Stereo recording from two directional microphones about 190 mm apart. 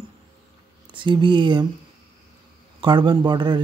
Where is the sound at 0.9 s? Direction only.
25° right (ahead or behind).